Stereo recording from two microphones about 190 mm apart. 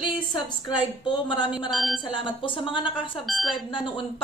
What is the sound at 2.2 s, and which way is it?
Speech, 25° left (ahead or behind).